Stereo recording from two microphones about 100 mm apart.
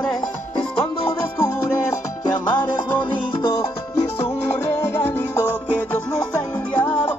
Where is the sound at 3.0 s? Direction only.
55° left (ahead or behind).